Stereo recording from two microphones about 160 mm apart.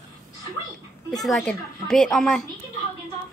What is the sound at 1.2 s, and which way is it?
A woman's voice, centre (ahead or behind).